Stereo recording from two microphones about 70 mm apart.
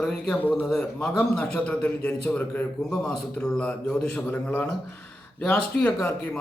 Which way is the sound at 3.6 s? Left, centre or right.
Centre.